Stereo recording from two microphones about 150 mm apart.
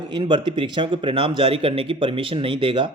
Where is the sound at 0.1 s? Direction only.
30° right (ahead or behind).